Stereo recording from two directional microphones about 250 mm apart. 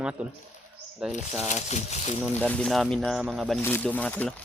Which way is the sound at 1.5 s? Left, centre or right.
Left.